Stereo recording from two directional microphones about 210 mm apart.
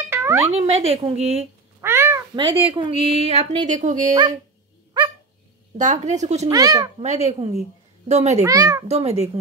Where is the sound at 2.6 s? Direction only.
25° right (ahead or behind).